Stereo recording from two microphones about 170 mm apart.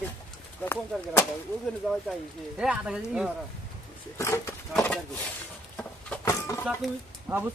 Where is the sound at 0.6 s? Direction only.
15° left (ahead or behind).